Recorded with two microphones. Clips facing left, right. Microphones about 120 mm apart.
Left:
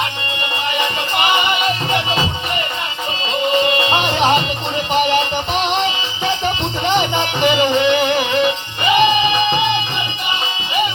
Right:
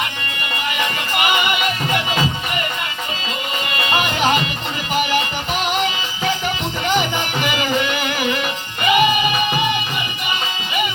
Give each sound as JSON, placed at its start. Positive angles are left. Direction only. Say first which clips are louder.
{"t": 0.8, "sound": "music", "louder": "left 2 dB", "side_deg": 25}
{"t": 3.6, "sound": "music", "louder": "left 5 dB", "side_deg": 25}